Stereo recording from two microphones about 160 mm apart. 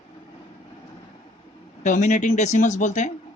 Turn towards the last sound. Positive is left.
turn(degrees=50)  # may be behind; listen again after turning